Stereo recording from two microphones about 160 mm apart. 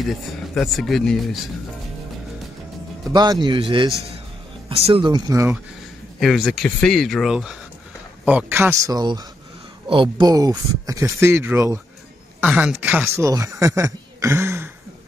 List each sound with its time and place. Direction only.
0.6 s speech: centre (ahead or behind)
3.1 s speech: 25° right (ahead or behind)
6.1 s speech: centre (ahead or behind); by 14.7 s 15° right (ahead or behind)